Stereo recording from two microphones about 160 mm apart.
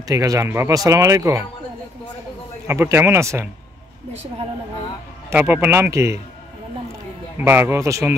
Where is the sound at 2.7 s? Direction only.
15° right (ahead or behind).